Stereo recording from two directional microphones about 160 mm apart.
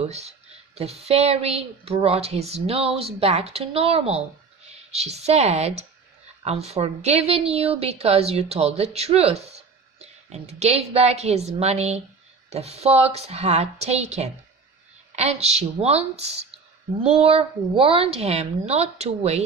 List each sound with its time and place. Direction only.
0.0 s a woman's voice: 40° right (ahead or behind)